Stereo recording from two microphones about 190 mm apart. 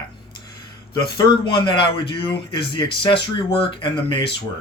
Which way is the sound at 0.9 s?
25° left (ahead or behind).